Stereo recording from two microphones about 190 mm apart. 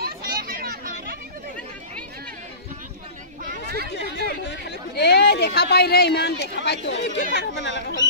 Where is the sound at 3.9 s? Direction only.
60° left (ahead or behind).